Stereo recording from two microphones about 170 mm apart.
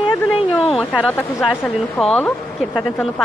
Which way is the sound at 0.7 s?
10° left (ahead or behind).